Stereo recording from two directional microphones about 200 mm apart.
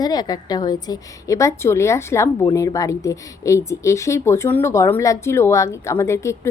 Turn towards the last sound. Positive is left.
turn(degrees=15)  # may be behind; listen again after turning